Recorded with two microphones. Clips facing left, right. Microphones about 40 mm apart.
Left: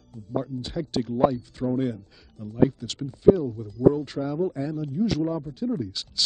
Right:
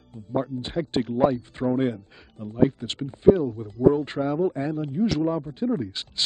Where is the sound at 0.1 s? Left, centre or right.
Right.